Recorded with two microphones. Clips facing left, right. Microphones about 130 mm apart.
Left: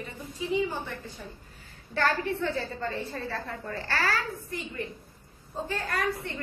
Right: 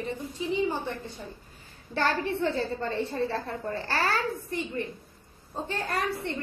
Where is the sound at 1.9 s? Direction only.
25° right (ahead or behind).